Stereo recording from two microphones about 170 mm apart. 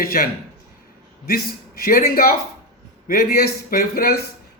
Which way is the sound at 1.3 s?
60° left (ahead or behind).